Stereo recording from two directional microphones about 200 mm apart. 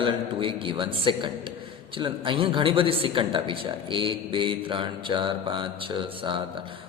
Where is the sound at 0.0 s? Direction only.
25° right (ahead or behind).